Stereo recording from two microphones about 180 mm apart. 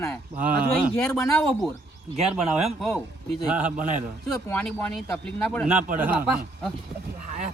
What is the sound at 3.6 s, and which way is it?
Speech, 45° right (ahead or behind).